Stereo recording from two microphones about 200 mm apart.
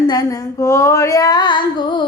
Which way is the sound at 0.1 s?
15° left (ahead or behind).